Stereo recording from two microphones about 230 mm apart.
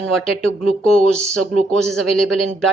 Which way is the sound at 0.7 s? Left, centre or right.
Left.